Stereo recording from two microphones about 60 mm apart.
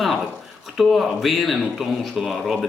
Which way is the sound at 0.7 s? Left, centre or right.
Centre.